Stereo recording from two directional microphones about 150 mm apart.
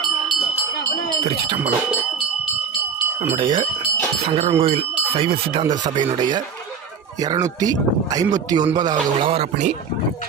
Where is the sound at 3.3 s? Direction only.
35° right (ahead or behind); by 9.7 s 50° right (ahead or behind).